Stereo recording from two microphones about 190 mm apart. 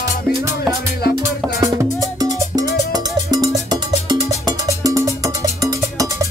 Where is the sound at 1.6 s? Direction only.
20° right (ahead or behind).